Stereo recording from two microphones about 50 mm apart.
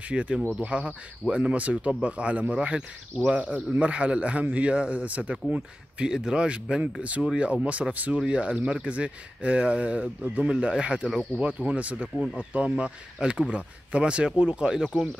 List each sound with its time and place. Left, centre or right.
0.1 s speech: right
7.9 s speech: right; by 11.4 s centre
11.4 s speech: right